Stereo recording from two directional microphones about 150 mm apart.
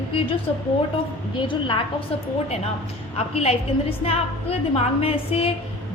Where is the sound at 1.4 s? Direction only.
35° left (ahead or behind).